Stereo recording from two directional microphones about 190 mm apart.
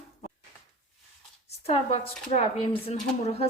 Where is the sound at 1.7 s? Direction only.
35° left (ahead or behind).